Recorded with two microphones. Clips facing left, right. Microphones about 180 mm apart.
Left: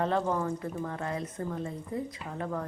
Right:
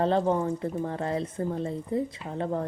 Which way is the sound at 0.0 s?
30° right (ahead or behind).